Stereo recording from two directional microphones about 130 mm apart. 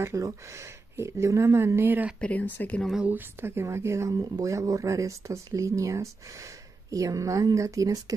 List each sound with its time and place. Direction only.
0.0 s speech: 25° right (ahead or behind)
2.1 s speech: 10° left (ahead or behind)
2.9 s speech: 10° right (ahead or behind)